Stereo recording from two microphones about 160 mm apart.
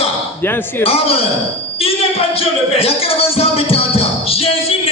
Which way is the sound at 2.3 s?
35° left (ahead or behind).